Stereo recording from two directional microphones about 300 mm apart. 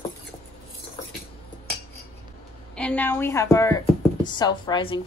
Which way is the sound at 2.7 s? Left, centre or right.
Centre.